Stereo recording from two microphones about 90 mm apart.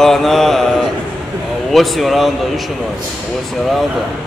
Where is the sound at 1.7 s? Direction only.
Centre (ahead or behind).